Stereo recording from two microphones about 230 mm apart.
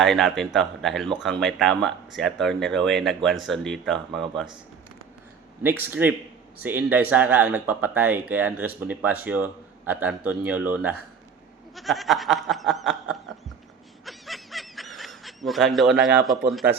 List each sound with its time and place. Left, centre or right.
0.0 s speech: centre
5.6 s speech: centre
14.0 s snicker: centre